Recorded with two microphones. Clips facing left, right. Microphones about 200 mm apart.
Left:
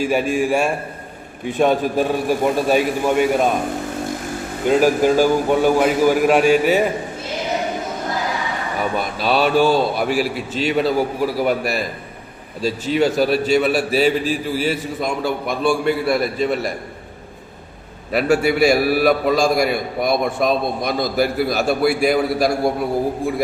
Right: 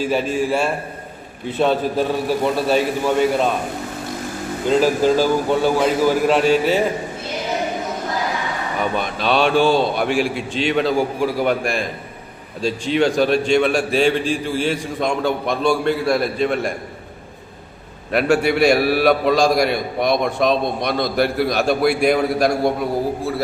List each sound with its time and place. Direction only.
0.0 s a man's voice: 10° left (ahead or behind)
4.8 s a man's voice: 15° left (ahead or behind)
9.0 s a man's voice: 5° left (ahead or behind)
10.1 s a man's voice: 40° left (ahead or behind)
10.3 s a man's voice: 5° left (ahead or behind)
18.1 s a man's voice: 5° left (ahead or behind)